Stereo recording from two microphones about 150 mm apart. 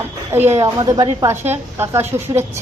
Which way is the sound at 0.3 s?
15° right (ahead or behind).